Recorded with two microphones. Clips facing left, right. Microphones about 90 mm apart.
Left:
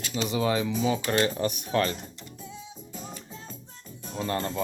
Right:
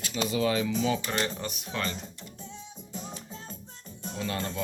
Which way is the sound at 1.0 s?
55° left (ahead or behind).